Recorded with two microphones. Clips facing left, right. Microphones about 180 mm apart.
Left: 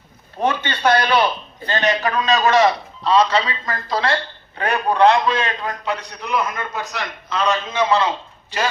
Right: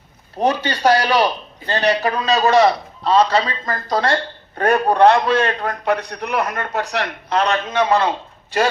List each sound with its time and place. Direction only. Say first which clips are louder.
0.3 s a man's voice: right 3 dB; 40° right (ahead or behind); by 8.1 s 55° right (ahead or behind)